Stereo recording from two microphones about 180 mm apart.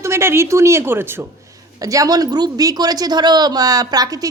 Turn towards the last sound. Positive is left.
turn(degrees=-20)  # may be behind; listen again after turning